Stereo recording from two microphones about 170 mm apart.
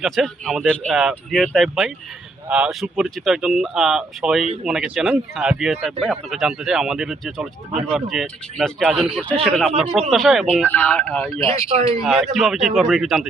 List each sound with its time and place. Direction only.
0.0 s speech: centre (ahead or behind)
10.7 s a man's voice: 10° left (ahead or behind)
11.7 s speech: 35° right (ahead or behind)
12.0 s speech: centre (ahead or behind)